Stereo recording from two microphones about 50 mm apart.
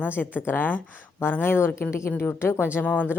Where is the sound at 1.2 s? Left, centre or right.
Left.